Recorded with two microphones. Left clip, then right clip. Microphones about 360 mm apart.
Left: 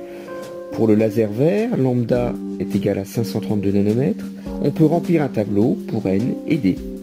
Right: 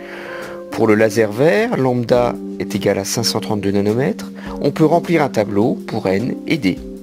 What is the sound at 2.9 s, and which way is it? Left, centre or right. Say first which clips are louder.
Speech: right 7 dB; right.